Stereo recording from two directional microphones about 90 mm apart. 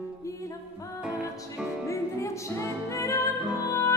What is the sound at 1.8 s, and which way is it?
Music, 35° left (ahead or behind).